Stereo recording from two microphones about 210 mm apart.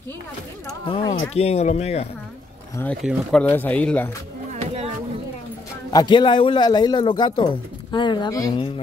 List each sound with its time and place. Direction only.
0.8 s a man's voice: 25° left (ahead or behind)
2.8 s speech: 5° left (ahead or behind)
4.5 s music: 30° right (ahead or behind)
5.9 s a man's voice: 20° left (ahead or behind)